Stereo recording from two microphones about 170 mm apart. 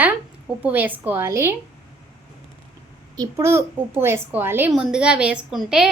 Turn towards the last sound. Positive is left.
turn(degrees=-5)  # may be behind; listen again after turning